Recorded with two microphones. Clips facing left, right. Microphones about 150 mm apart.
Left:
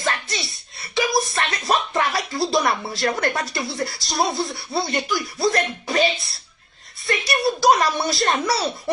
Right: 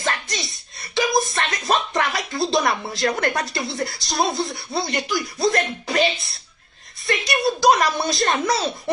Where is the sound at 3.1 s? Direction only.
20° right (ahead or behind).